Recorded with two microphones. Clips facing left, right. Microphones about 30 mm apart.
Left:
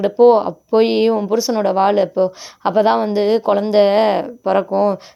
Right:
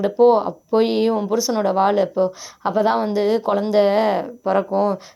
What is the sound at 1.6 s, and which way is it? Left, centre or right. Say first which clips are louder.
Speech: left 2 dB; left.